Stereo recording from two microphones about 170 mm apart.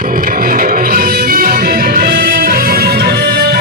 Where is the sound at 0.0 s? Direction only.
55° right (ahead or behind).